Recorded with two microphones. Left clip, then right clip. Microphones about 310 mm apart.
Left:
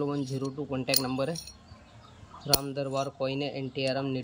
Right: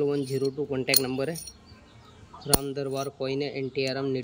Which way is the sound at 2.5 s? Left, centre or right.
Centre.